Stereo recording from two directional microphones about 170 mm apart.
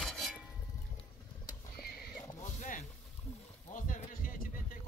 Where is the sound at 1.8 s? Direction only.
65° left (ahead or behind).